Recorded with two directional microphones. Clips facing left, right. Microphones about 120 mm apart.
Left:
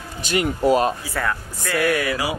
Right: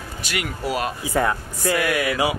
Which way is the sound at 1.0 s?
20° right (ahead or behind).